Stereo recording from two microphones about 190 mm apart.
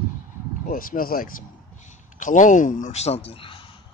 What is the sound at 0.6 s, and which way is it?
Speech, 45° left (ahead or behind).